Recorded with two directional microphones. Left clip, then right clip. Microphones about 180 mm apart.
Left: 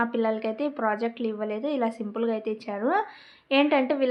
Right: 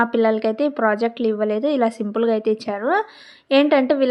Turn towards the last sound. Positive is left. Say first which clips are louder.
# right 7 dB
turn(degrees=-40)  # may be behind; listen again after turning